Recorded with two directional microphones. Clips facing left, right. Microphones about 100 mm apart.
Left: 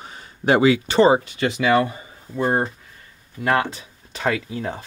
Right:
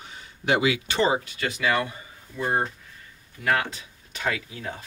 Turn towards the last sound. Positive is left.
turn(degrees=30)  # may be behind; listen again after turning